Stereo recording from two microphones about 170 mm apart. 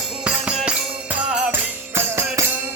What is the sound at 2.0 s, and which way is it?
Music, 15° right (ahead or behind).